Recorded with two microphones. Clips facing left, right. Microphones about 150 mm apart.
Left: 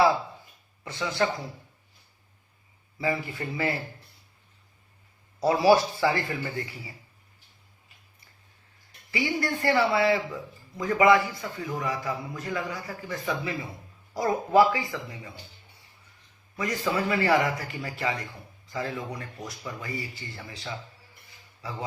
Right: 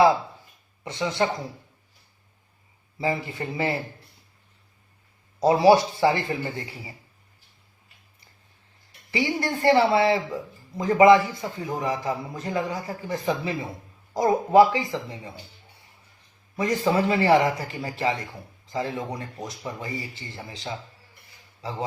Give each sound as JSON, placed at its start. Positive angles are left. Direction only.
{"t": 0.9, "sound": "speech", "side_deg": -20}
{"t": 3.0, "sound": "speech", "side_deg": -25}
{"t": 5.4, "sound": "speech", "side_deg": -20}
{"t": 9.1, "sound": "speech", "side_deg": -25}
{"t": 16.6, "sound": "a man's voice", "side_deg": -25}